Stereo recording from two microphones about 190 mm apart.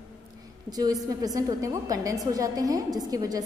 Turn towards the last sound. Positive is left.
turn(degrees=-20)  # may be behind; listen again after turning